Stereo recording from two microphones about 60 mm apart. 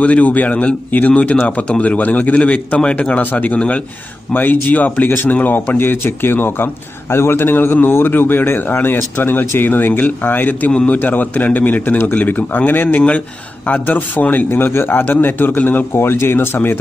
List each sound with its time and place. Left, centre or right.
0.0 s a man's voice: left
14.5 s a man's voice: left